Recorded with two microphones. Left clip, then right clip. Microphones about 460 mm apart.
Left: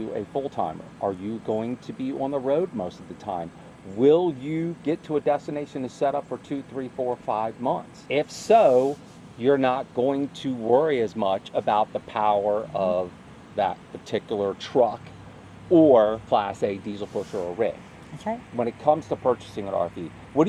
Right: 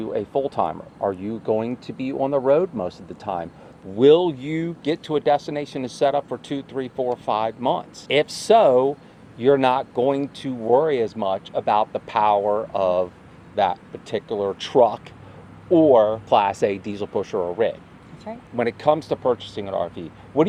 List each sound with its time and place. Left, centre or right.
0.1 s speech: right
14.1 s speech: centre
14.6 s speech: right
15.7 s speech: centre
16.3 s speech: right
18.5 s speech: right; by 19.9 s centre